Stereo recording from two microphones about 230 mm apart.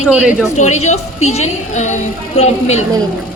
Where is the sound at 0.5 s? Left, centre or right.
Left.